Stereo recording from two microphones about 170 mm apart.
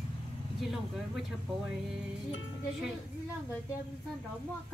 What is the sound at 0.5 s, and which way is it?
Speech, centre (ahead or behind).